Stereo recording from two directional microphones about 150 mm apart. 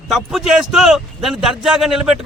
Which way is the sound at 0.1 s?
5° right (ahead or behind).